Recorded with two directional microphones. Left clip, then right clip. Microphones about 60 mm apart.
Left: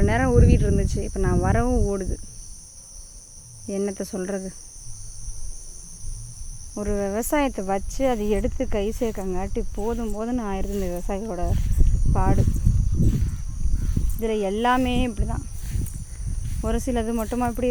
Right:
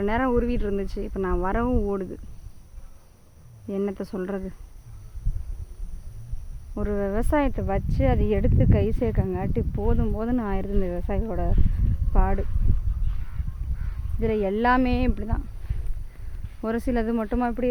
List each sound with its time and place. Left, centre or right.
0.0 s speech: left
1.6 s speech: centre
1.9 s speech: centre
3.7 s speech: left
6.7 s speech: centre
7.4 s speech: centre
8.4 s speech: centre
13.7 s crow: centre
14.8 s speech: centre
16.6 s speech: centre